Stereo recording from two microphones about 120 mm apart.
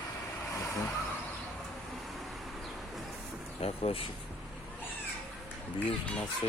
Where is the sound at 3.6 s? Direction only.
55° left (ahead or behind).